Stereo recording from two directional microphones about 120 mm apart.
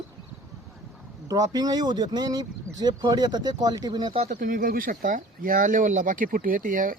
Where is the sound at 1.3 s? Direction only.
30° right (ahead or behind).